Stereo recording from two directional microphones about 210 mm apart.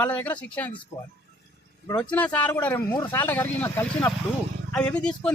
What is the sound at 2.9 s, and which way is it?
Speech, 20° left (ahead or behind).